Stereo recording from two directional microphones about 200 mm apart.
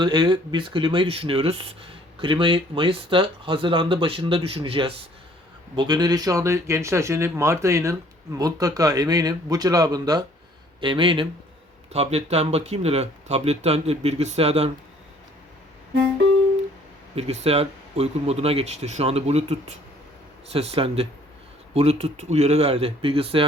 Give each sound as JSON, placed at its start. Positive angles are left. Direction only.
{"t": 0.0, "sound": "speech", "side_deg": -20}
{"t": 17.2, "sound": "speech", "side_deg": -30}